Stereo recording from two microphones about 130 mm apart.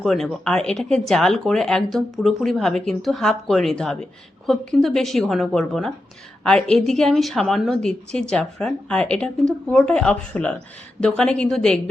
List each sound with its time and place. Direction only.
0.0 s speech: centre (ahead or behind)